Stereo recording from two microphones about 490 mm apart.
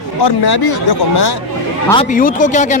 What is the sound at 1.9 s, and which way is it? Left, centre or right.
Speech, centre.